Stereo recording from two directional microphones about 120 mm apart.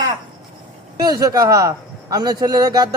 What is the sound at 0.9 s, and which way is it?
A man's voice, 30° right (ahead or behind).